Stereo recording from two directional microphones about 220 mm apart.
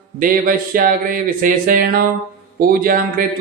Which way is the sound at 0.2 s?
40° right (ahead or behind).